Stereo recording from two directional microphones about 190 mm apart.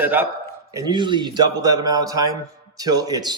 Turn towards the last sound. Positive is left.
turn(degrees=-20)  # may be behind; listen again after turning